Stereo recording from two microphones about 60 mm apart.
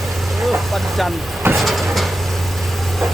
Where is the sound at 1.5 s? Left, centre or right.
Centre.